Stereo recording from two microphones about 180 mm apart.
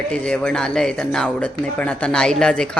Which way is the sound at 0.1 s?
5° left (ahead or behind).